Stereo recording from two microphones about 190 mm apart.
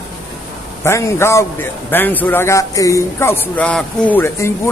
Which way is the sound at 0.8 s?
15° left (ahead or behind).